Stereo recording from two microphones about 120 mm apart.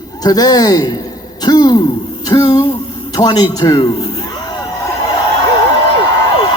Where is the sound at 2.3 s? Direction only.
30° left (ahead or behind).